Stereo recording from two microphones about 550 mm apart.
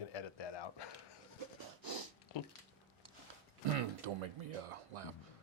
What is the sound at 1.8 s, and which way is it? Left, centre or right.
Snort, right.